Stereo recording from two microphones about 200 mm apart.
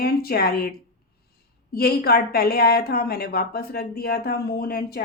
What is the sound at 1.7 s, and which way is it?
Speech, 50° left (ahead or behind).